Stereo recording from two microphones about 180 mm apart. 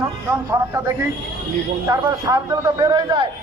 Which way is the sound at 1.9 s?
20° right (ahead or behind).